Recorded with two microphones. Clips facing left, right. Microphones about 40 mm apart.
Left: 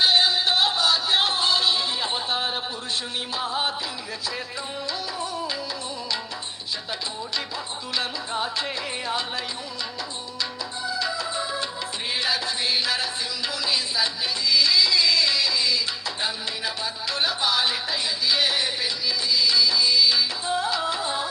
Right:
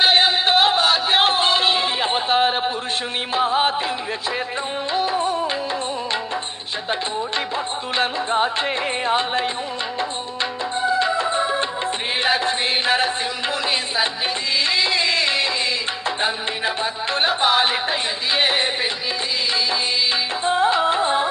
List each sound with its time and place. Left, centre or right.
0.0 s music: right
4.9 s music: right
7.9 s music: right
10.8 s music: right